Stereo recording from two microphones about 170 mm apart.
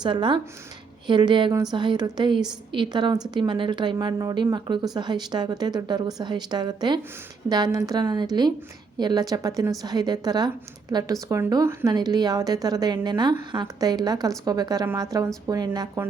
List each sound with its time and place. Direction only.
0.0 s a woman's voice: 30° right (ahead or behind)